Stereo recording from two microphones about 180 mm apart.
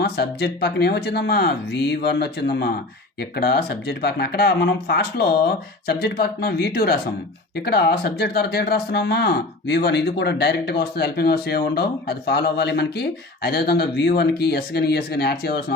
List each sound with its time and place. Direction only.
0.0 s speech: 65° left (ahead or behind)